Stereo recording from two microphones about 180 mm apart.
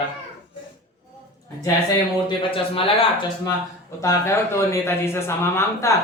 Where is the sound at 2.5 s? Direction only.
30° left (ahead or behind).